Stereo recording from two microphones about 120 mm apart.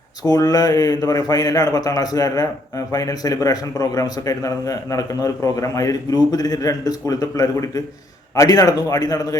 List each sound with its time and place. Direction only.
0.2 s a man's voice: 30° left (ahead or behind)